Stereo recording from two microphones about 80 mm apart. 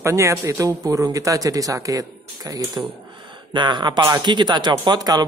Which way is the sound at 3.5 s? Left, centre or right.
Right.